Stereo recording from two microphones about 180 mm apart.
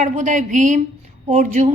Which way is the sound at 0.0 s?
45° right (ahead or behind).